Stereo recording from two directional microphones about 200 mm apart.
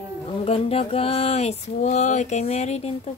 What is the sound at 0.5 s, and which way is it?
Speech, 30° left (ahead or behind).